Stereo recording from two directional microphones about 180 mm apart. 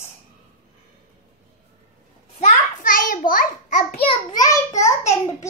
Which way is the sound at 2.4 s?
50° left (ahead or behind).